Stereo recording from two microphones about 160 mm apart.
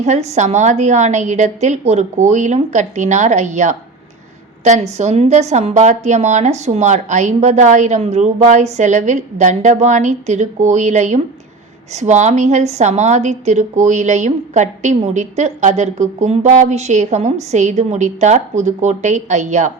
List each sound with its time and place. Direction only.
0.0 s a woman's voice: 45° right (ahead or behind)